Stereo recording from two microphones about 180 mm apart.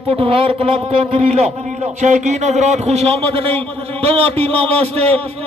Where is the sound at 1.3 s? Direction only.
40° right (ahead or behind).